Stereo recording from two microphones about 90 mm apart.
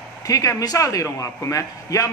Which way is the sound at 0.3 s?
40° left (ahead or behind).